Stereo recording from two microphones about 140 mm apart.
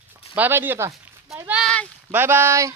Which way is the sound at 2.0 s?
15° right (ahead or behind).